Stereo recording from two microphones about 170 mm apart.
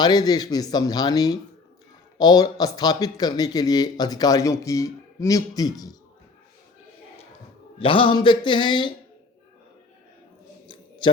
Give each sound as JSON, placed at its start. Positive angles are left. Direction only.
{"t": 0.0, "sound": "speech", "side_deg": 25}
{"t": 7.8, "sound": "speech", "side_deg": 30}
{"t": 10.7, "sound": "a sound", "side_deg": 30}